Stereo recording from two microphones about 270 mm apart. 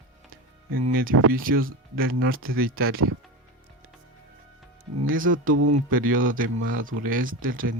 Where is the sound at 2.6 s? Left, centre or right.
Right.